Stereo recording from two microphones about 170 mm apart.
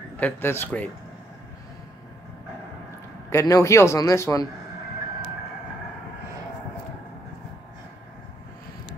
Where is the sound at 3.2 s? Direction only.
20° left (ahead or behind).